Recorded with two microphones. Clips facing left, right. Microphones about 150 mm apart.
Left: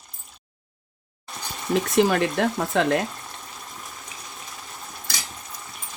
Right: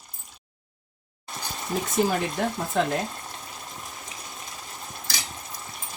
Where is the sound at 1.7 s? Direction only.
80° left.